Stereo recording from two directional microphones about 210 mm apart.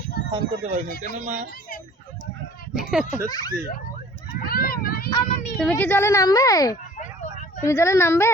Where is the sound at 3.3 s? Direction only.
20° left (ahead or behind).